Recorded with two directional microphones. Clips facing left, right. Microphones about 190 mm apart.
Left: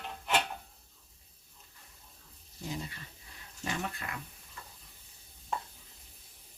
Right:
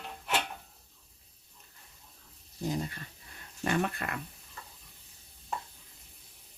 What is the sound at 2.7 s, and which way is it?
Speech, 45° right (ahead or behind).